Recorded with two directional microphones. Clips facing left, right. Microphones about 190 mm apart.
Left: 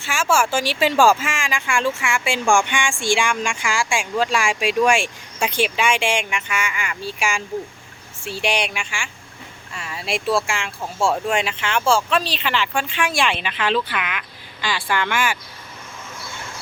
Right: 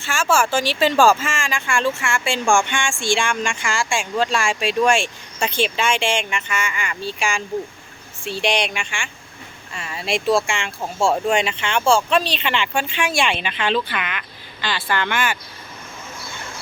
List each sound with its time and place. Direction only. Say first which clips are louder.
0.0 s speech: right 1 dB; 10° left (ahead or behind)